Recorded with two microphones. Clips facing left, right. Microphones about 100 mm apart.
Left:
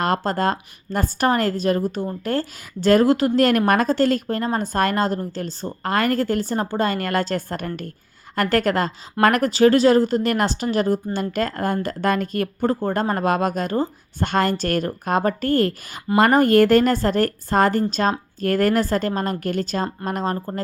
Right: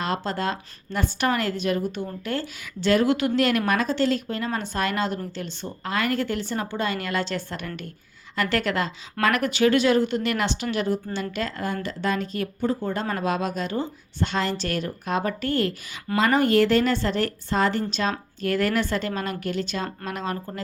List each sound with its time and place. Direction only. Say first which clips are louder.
0.0 s speech: left 6 dB; 45° left (ahead or behind)